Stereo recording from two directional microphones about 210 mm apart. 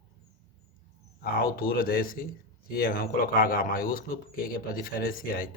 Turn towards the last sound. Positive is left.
turn(degrees=45)  # may be behind; listen again after turning